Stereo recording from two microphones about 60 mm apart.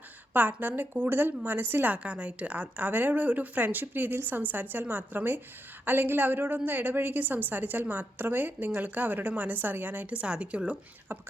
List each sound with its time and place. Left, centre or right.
0.3 s a woman's voice: right
11.1 s speech: right